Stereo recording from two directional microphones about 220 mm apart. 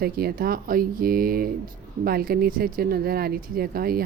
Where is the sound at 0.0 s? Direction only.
45° right (ahead or behind).